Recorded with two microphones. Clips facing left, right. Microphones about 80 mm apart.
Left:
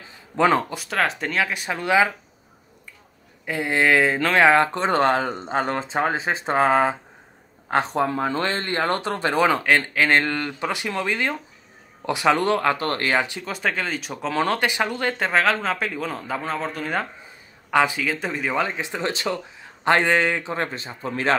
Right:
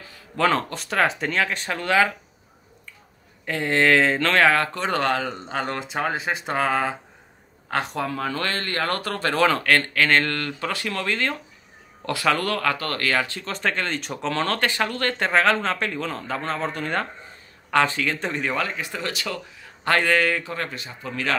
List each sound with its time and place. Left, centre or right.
0.4 s speech: centre
0.8 s speech: centre
3.4 s speech: centre
18.6 s speech: left